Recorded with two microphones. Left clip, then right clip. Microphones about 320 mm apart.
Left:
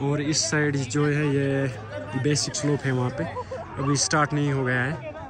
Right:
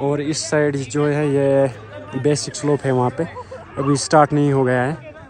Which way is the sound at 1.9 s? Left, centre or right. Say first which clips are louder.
Right 2 dB; left.